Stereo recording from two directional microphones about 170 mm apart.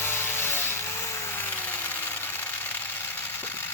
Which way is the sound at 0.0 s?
15° left (ahead or behind).